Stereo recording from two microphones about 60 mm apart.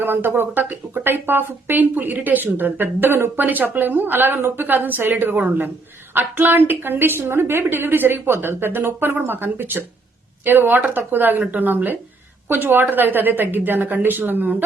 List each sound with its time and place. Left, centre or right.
0.0 s speech: right